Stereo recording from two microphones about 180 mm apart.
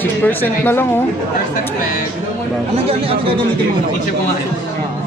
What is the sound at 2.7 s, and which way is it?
Speech, 30° right (ahead or behind).